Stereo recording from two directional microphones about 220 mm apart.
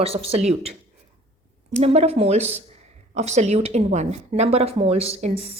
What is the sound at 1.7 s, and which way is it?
A woman's voice, 30° right (ahead or behind).